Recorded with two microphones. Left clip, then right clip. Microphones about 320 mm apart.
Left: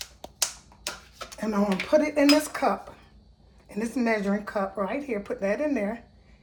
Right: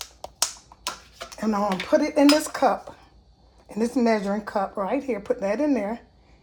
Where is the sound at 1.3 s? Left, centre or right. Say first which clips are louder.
Right 3 dB; right.